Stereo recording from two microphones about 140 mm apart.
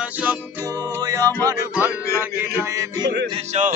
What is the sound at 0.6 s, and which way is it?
Music, 25° right (ahead or behind).